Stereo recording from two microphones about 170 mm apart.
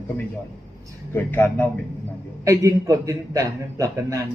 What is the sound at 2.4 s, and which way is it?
A man's voice, 20° right (ahead or behind).